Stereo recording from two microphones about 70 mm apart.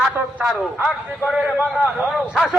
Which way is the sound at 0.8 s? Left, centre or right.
Centre.